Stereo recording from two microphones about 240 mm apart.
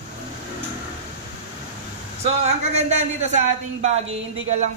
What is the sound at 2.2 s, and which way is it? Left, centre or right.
A man's voice, right.